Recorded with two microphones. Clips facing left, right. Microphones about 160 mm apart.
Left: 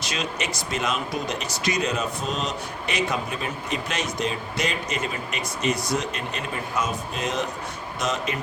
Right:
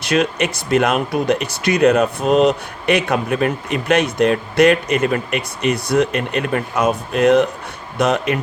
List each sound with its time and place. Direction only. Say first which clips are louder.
0.0 s speech: right 12 dB; 60° right (ahead or behind)